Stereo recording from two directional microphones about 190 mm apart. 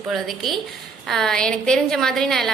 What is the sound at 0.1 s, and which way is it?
A woman's voice, centre (ahead or behind).